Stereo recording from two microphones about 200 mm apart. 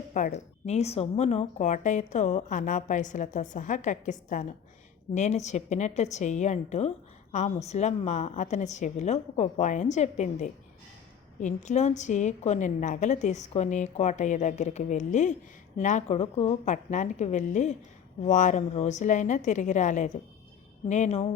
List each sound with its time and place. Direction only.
0.1 s speech: 35° left (ahead or behind)